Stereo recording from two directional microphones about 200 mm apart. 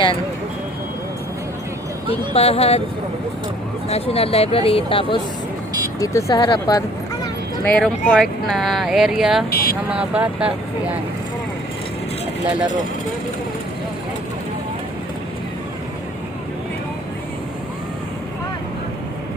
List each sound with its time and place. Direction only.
2.3 s speech: 30° left (ahead or behind)
3.8 s speech: 30° left (ahead or behind)
7.6 s speech: 5° left (ahead or behind)
9.5 s speech: 50° left (ahead or behind)
9.9 s speech: 5° right (ahead or behind)